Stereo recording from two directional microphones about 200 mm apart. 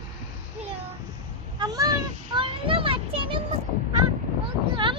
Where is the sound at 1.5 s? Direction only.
20° right (ahead or behind).